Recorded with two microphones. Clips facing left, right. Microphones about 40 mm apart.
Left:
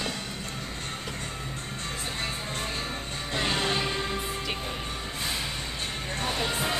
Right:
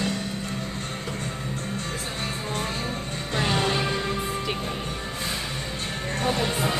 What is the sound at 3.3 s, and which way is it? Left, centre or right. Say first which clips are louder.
Music: right 3 dB; centre.